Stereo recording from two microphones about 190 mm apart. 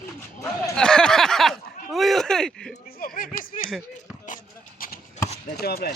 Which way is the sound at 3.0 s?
50° left (ahead or behind).